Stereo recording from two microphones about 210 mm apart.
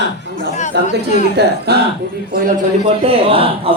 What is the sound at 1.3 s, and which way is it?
Speech, 50° right (ahead or behind).